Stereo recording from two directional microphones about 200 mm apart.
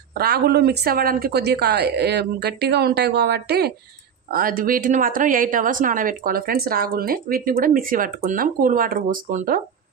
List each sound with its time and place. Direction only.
0.1 s a woman's voice: 50° right (ahead or behind)